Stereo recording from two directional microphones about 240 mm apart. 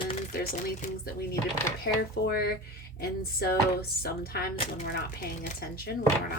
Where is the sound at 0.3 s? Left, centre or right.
Left.